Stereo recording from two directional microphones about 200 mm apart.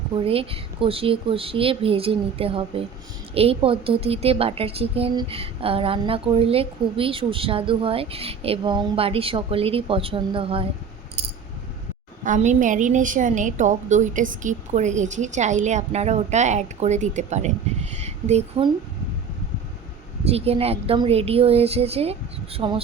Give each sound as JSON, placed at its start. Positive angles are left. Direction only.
{"t": 0.3, "sound": "a woman's voice", "side_deg": -30}
{"t": 12.2, "sound": "a woman's voice", "side_deg": -40}
{"t": 20.2, "sound": "a woman's voice", "side_deg": -30}